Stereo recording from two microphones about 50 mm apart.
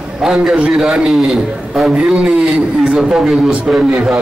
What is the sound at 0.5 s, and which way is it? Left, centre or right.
A man's voice, centre.